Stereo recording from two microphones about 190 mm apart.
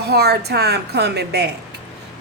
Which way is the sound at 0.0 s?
55° right (ahead or behind).